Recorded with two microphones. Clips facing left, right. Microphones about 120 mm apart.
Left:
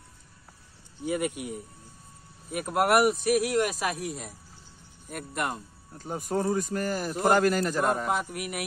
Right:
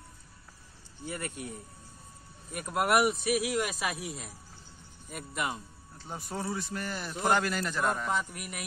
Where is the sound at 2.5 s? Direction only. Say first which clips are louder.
Left 4 dB; 5° left (ahead or behind).